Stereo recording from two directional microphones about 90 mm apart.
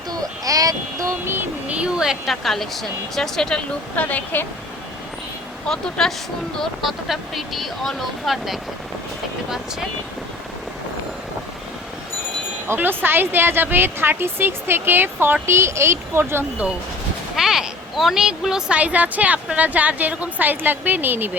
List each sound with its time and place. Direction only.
0.1 s a sound: 40° right (ahead or behind)
1.6 s speech: 15° right (ahead or behind); by 3.6 s 5° left (ahead or behind)
3.9 s speech: 20° left (ahead or behind)
5.6 s speech: 5° left (ahead or behind)
12.6 s a woman's voice: 25° right (ahead or behind)
17.3 s speech: 5° right (ahead or behind); by 21.2 s 20° right (ahead or behind)